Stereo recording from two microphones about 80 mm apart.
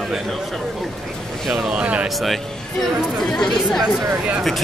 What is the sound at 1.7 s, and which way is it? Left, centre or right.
Speech, centre.